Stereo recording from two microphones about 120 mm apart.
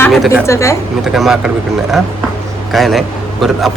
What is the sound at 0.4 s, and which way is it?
Speech, 25° left (ahead or behind).